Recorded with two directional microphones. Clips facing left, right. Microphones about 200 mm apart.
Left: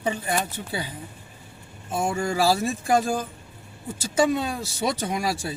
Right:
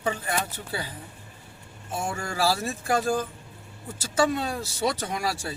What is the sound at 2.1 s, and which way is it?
Speech, 20° left (ahead or behind).